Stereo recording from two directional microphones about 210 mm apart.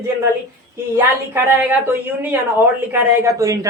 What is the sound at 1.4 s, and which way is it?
A woman's voice, 10° right (ahead or behind).